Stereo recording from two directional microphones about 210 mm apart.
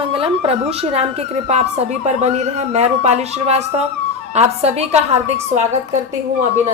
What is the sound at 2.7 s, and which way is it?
A woman's voice, 30° right (ahead or behind).